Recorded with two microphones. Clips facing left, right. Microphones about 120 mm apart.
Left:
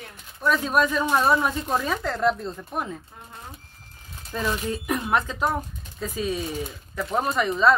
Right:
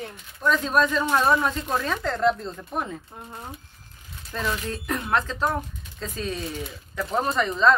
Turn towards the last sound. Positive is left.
turn(degrees=5)  # may be behind; listen again after turning